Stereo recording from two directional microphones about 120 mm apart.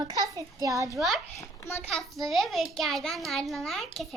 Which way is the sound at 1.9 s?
Centre (ahead or behind).